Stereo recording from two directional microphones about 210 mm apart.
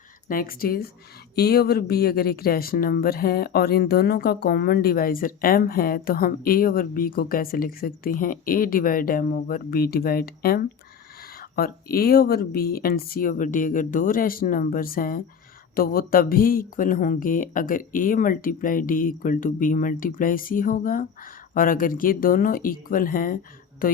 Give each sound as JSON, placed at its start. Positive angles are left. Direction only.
{"t": 0.3, "sound": "speech", "side_deg": 45}